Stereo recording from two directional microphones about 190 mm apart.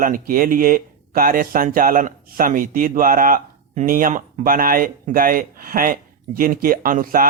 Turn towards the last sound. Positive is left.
turn(degrees=-50)  # may be behind; listen again after turning